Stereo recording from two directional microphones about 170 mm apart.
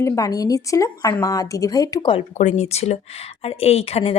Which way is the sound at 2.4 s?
45° left (ahead or behind).